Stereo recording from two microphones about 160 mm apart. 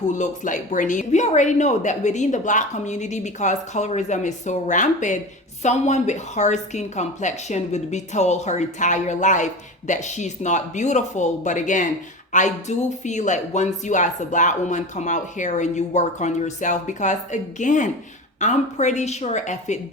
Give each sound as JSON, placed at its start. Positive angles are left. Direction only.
{"t": 0.1, "sound": "a woman's voice", "side_deg": 50}